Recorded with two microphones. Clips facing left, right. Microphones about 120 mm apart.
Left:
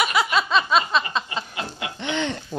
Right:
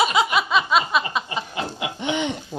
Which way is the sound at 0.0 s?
20° right (ahead or behind).